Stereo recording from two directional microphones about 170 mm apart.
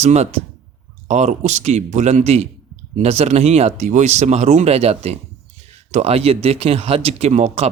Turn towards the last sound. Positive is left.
turn(degrees=-40)  # may be behind; listen again after turning